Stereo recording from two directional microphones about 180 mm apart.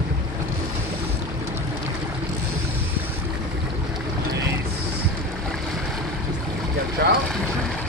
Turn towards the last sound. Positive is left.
turn(degrees=-65)  # may be behind; listen again after turning